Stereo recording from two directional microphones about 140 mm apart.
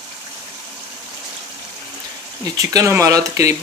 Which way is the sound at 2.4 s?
25° right (ahead or behind).